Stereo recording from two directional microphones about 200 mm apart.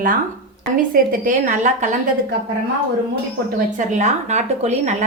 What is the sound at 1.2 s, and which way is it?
Speech, 40° right (ahead or behind).